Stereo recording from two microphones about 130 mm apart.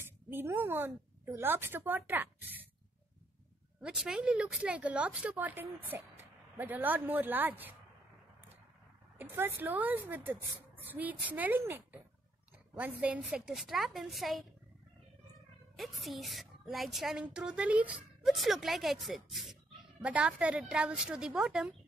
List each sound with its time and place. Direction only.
0.0 s a woman's voice: 20° right (ahead or behind)
3.8 s speech: 5° right (ahead or behind)
9.2 s a woman's voice: 15° right (ahead or behind); by 14.4 s centre (ahead or behind)
15.7 s a woman's voice: centre (ahead or behind)